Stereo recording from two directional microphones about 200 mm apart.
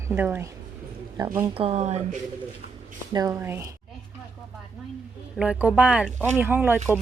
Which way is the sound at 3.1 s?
15° right (ahead or behind).